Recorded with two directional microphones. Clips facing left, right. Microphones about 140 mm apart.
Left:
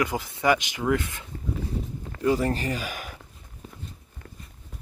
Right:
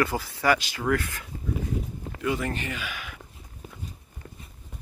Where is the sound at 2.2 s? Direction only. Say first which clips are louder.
Left 5 dB; 35° left (ahead or behind).